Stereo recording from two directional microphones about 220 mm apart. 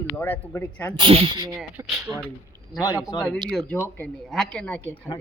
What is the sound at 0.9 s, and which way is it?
Speech, 25° right (ahead or behind).